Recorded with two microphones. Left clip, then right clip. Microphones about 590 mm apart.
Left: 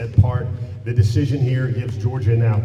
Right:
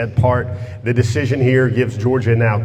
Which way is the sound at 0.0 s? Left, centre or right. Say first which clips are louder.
Right 10 dB; right.